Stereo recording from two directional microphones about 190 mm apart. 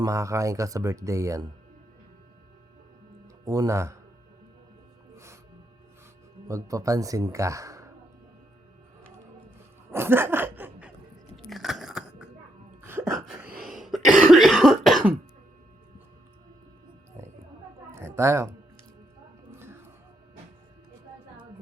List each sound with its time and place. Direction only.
0.0 s speech: 15° right (ahead or behind)
3.4 s speech: 15° right (ahead or behind)
5.1 s music: 15° right (ahead or behind)
6.5 s speech: 15° right (ahead or behind)
9.9 s laughter: 10° right (ahead or behind)
11.4 s biting: centre (ahead or behind)
12.8 s a sound: 15° right (ahead or behind)
13.6 s cough: centre (ahead or behind)
17.9 s a sound: 15° right (ahead or behind)